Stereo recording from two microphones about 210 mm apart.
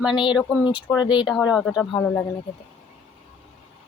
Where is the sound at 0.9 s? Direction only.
20° left (ahead or behind).